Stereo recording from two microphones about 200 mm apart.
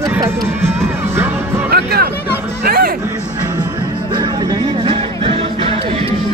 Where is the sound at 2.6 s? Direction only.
45° right (ahead or behind).